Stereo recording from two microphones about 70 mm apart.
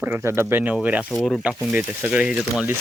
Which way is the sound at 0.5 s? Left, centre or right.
Right.